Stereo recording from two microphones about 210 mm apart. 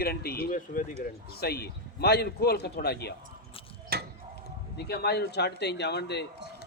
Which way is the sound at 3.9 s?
45° right (ahead or behind).